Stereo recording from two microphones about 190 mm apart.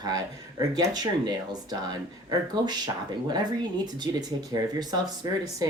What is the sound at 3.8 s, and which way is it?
Speech, 20° right (ahead or behind).